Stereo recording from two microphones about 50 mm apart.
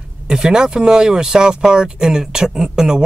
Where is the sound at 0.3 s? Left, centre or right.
Centre.